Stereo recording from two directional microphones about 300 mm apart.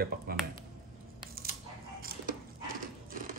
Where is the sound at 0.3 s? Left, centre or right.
Right.